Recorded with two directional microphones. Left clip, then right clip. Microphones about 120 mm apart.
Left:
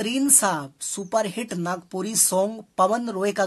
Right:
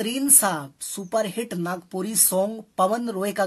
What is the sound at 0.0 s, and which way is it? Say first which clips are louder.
Speech: left 1 dB; 20° left (ahead or behind).